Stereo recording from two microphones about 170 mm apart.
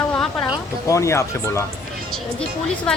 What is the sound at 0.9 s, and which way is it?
Speech, 15° left (ahead or behind).